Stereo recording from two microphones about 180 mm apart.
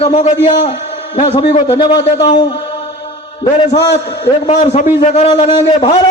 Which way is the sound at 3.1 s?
30° left (ahead or behind).